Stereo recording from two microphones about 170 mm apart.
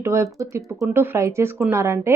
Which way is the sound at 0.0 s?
15° right (ahead or behind).